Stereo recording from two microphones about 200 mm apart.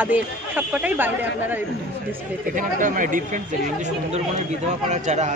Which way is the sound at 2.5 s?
40° right (ahead or behind).